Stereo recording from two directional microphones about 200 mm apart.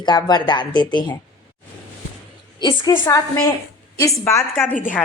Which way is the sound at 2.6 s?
20° left (ahead or behind).